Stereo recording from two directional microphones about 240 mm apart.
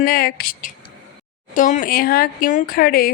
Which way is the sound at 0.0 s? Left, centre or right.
Left.